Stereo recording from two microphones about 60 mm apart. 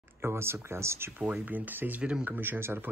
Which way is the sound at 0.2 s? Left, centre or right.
Right.